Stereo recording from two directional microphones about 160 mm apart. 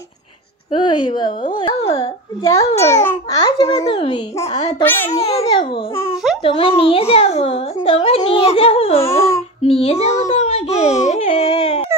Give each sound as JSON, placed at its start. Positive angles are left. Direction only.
{"t": 0.7, "sound": "a child's voice", "side_deg": 30}
{"t": 2.9, "sound": "a child's voice", "side_deg": 15}
{"t": 3.3, "sound": "a child's voice", "side_deg": 25}
{"t": 4.8, "sound": "a child's voice", "side_deg": 15}
{"t": 5.1, "sound": "a child's voice", "side_deg": 40}
{"t": 10.2, "sound": "baby cry", "side_deg": 40}